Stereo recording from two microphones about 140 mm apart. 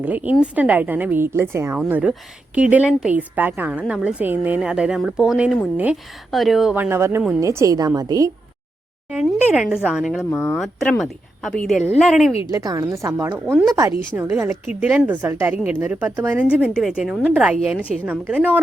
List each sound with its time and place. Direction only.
0.0 s a woman's voice: 10° right (ahead or behind)
5.7 s a woman's voice: 10° right (ahead or behind)
6.3 s a woman's voice: centre (ahead or behind)
6.7 s a woman's voice: 15° right (ahead or behind)
9.2 s a woman's voice: 5° right (ahead or behind)
12.5 s a woman's voice: 25° right (ahead or behind)
13.5 s a woman's voice: centre (ahead or behind)
14.2 s a woman's voice: 15° right (ahead or behind)